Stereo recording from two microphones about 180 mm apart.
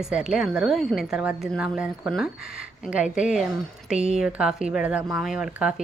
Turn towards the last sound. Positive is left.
turn(degrees=-5)  # may be behind; listen again after turning